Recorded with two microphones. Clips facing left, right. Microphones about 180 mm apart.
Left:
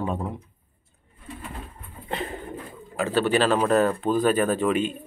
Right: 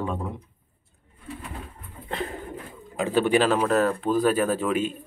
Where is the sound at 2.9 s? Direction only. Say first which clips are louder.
Right 1 dB; 15° right (ahead or behind).